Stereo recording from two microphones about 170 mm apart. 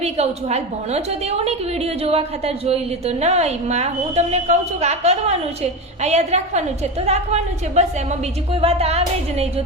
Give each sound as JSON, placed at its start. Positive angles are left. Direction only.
{"t": 0.0, "sound": "a woman's voice", "side_deg": -40}